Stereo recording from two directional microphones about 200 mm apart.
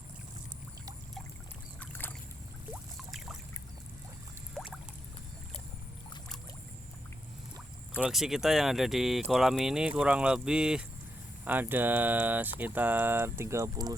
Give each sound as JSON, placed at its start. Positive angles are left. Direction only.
{"t": 1.8, "sound": "boat", "side_deg": 10}
{"t": 4.5, "sound": "pour", "side_deg": 0}
{"t": 8.0, "sound": "speech", "side_deg": 0}